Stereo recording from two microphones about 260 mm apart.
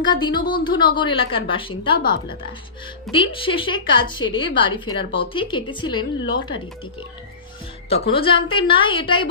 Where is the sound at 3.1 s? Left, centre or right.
Centre.